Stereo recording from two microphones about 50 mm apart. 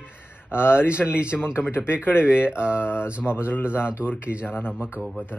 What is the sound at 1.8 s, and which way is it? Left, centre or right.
Speech, left.